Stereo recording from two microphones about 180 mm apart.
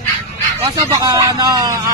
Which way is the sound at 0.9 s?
20° right (ahead or behind).